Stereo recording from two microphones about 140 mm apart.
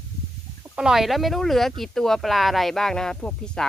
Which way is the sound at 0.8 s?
5° right (ahead or behind).